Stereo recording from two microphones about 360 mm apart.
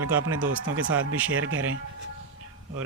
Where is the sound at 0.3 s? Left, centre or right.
Right.